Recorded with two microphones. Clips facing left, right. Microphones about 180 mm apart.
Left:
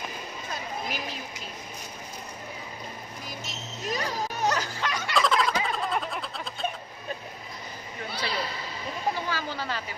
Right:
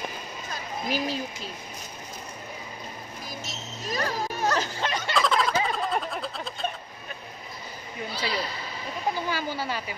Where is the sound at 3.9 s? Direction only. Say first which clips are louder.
Right 2 dB; 15° left (ahead or behind).